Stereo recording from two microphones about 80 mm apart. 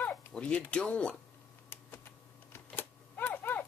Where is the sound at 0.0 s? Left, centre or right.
Centre.